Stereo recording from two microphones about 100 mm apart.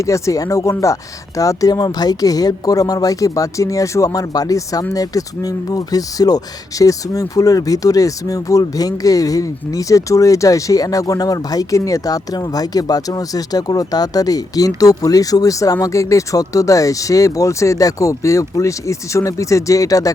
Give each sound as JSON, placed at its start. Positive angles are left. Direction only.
{"t": 0.0, "sound": "speech", "side_deg": 30}